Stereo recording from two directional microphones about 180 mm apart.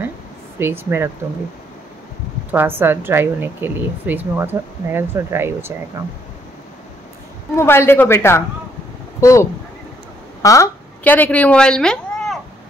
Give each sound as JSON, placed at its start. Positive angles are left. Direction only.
{"t": 0.6, "sound": "a woman's voice", "side_deg": -10}
{"t": 2.5, "sound": "a woman's voice", "side_deg": -10}
{"t": 7.5, "sound": "a man's voice", "side_deg": 15}